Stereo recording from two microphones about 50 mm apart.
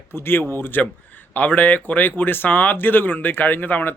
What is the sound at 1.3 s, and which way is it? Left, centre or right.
Speech, left.